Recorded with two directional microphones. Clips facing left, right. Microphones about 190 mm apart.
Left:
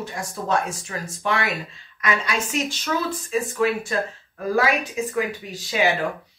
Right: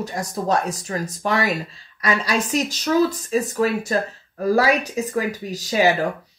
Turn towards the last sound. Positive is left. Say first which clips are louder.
# right 4 dB
turn(degrees=-40)  # may be behind; listen again after turning